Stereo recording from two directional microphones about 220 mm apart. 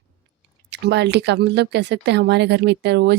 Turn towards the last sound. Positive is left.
turn(degrees=-50)  # may be behind; listen again after turning